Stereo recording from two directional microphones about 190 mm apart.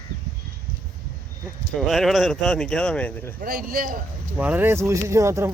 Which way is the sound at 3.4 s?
50° right (ahead or behind).